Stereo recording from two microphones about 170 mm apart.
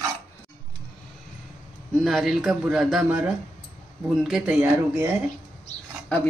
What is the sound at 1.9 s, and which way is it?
A man's voice, centre (ahead or behind).